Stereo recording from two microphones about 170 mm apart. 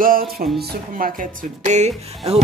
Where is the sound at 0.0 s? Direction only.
60° right (ahead or behind).